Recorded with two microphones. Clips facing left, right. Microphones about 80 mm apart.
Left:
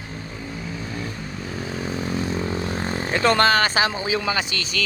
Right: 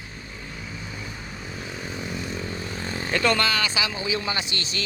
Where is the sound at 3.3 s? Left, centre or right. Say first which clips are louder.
Left 7 dB; left.